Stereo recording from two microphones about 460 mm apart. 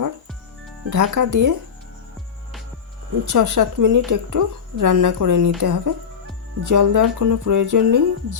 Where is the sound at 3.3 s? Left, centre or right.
Right.